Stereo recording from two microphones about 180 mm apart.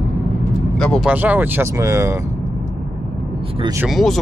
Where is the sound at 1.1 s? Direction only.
10° right (ahead or behind).